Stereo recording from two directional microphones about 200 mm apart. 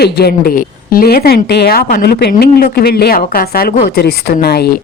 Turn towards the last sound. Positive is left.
turn(degrees=55)  # may be behind; listen again after turning